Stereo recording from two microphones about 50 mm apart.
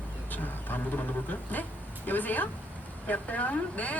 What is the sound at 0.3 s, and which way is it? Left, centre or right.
Speech, left.